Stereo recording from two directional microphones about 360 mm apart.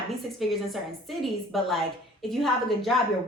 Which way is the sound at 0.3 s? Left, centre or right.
Centre.